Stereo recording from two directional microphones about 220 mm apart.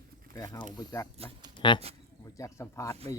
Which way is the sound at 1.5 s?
20° left (ahead or behind).